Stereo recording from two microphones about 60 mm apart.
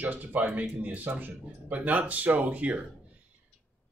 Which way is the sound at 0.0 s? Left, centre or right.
Right.